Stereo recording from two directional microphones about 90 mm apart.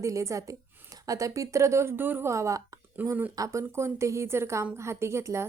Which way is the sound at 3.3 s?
35° right (ahead or behind).